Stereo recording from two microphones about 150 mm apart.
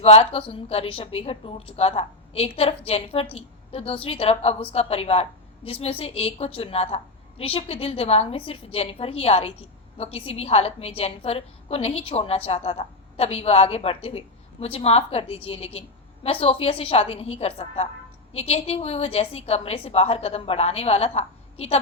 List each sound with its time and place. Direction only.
0.0 s a woman's voice: 40° left (ahead or behind)